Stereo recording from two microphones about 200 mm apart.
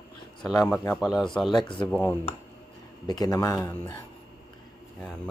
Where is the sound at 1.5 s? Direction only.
25° left (ahead or behind).